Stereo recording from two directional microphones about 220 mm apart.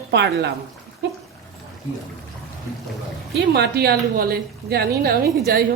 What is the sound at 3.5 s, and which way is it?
A woman's voice, 45° right (ahead or behind).